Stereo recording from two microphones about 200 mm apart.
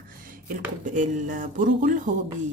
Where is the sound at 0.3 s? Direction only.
40° right (ahead or behind).